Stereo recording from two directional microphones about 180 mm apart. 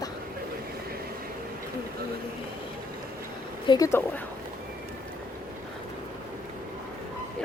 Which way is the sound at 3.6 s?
20° left (ahead or behind).